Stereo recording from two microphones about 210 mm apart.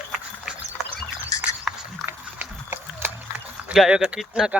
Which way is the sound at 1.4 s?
5° right (ahead or behind).